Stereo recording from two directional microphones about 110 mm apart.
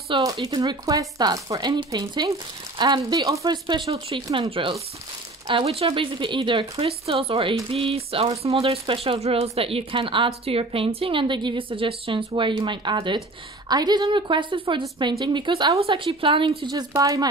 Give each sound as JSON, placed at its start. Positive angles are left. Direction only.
{"t": 0.2, "sound": "speech", "side_deg": -35}
{"t": 3.9, "sound": "speech", "side_deg": -60}
{"t": 15.7, "sound": "speech", "side_deg": -55}
{"t": 16.9, "sound": "speech", "side_deg": -30}